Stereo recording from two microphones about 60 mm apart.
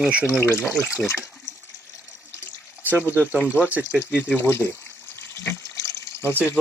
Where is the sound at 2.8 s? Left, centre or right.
Left.